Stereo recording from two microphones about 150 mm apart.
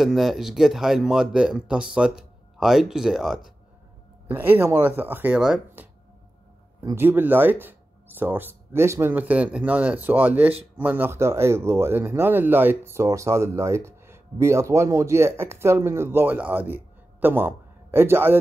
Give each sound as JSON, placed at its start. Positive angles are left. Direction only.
{"t": 0.0, "sound": "speech", "side_deg": 0}
{"t": 4.3, "sound": "speech", "side_deg": -15}
{"t": 6.8, "sound": "speech", "side_deg": -15}